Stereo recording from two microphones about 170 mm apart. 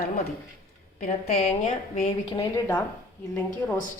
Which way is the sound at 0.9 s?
55° left (ahead or behind).